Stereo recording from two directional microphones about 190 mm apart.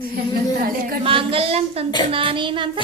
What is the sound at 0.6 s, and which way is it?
Speech, 50° right (ahead or behind).